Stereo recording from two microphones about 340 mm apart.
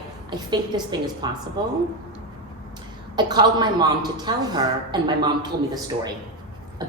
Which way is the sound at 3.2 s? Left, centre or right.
Centre.